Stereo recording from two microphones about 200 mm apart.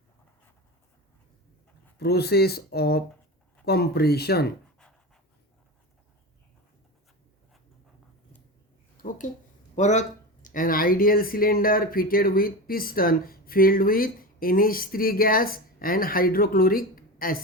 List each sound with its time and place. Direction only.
2.0 s speech: 55° left (ahead or behind)
4.8 s pant: 5° left (ahead or behind)
9.0 s speech: 40° left (ahead or behind)